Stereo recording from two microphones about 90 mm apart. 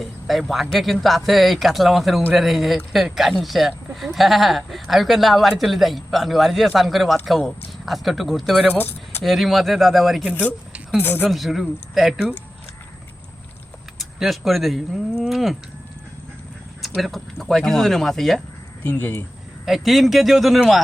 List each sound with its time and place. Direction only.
0.0 s speech: centre (ahead or behind)
8.7 s speech: 20° left (ahead or behind)
9.2 s speech: centre (ahead or behind)
11.0 s speech: 20° left (ahead or behind)
11.3 s speech: centre (ahead or behind)
14.0 s speech: centre (ahead or behind)
17.0 s speech: centre (ahead or behind)
18.9 s speech: 20° left (ahead or behind)
19.6 s speech: centre (ahead or behind)